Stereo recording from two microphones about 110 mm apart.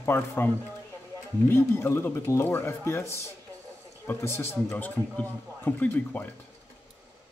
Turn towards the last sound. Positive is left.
turn(degrees=20)  # may be behind; listen again after turning